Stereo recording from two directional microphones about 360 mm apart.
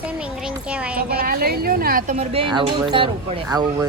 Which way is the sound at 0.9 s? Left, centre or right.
Right.